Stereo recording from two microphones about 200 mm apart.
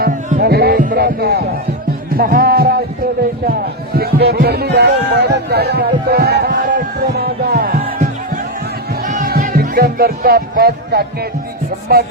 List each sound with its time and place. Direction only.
0.0 s music: 45° right (ahead or behind)
3.9 s music: 50° right (ahead or behind)